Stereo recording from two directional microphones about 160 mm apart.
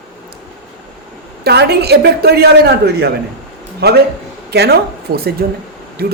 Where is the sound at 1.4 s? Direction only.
90° right.